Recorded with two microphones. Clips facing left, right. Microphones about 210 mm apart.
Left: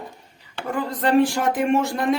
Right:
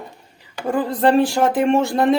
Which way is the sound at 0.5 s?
30° right (ahead or behind).